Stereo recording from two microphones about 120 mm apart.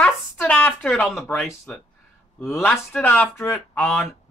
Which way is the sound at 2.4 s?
20° left (ahead or behind).